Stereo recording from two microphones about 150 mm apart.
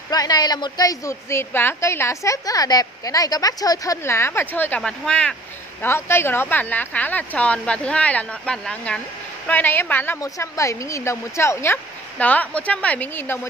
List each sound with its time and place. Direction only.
0.1 s a woman's voice: 25° left (ahead or behind); by 5.3 s 5° left (ahead or behind)
5.8 s speech: 15° left (ahead or behind)
10.2 s speech: 20° left (ahead or behind)